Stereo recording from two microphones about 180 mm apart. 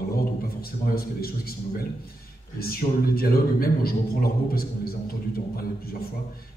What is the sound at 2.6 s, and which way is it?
A man's voice, 55° left (ahead or behind).